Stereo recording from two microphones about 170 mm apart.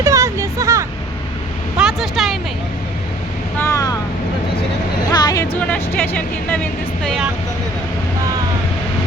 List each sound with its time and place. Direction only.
0.0 s a sound: 15° right (ahead or behind)
1.8 s vehicle: centre (ahead or behind)
3.6 s vehicle: 20° left (ahead or behind)
5.1 s a sound: 20° left (ahead or behind)
5.5 s speech: 10° left (ahead or behind)
7.0 s vehicle: centre (ahead or behind)